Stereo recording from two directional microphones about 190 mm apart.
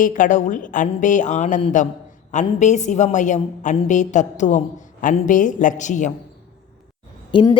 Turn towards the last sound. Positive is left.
turn(degrees=25)  # may be behind; listen again after turning